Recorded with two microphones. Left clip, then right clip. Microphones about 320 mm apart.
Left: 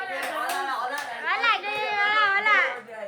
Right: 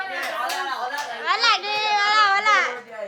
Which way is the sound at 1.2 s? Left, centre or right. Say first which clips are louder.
Right 4 dB; centre.